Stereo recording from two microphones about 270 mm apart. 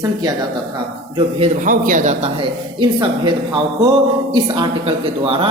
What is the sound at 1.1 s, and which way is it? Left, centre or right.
A man's voice, right.